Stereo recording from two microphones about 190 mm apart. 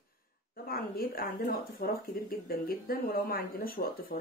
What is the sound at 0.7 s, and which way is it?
Speech, 50° left (ahead or behind).